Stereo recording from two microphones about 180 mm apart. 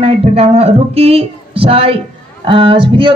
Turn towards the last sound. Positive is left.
turn(degrees=-30)  # may be behind; listen again after turning